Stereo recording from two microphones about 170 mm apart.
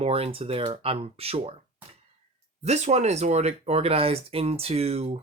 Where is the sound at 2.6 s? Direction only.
40° right (ahead or behind).